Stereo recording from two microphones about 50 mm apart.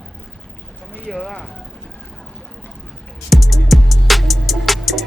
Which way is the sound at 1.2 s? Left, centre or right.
Centre.